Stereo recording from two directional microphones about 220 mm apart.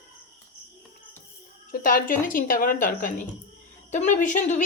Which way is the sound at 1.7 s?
40° left (ahead or behind).